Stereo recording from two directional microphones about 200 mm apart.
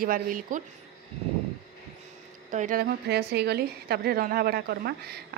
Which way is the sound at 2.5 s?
40° right (ahead or behind).